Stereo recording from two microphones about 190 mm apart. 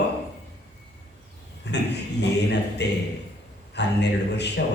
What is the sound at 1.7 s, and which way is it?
A man's voice, 65° left (ahead or behind).